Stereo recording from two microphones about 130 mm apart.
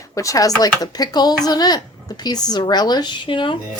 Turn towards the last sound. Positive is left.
turn(degrees=40)  # may be behind; listen again after turning